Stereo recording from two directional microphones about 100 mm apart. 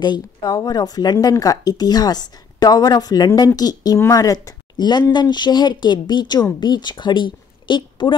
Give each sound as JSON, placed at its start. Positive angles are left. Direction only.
{"t": 0.0, "sound": "a woman's voice", "side_deg": 40}